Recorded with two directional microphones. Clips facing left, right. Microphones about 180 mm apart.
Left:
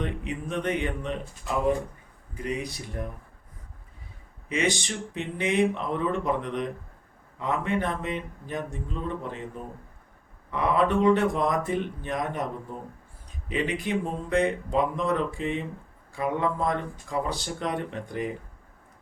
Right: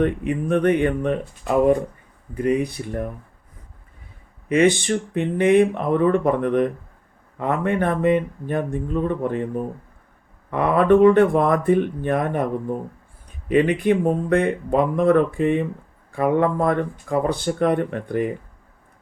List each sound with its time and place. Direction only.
0.0 s speech: 55° right (ahead or behind)
4.4 s speech: 55° right (ahead or behind)
10.5 s speech: 55° right (ahead or behind)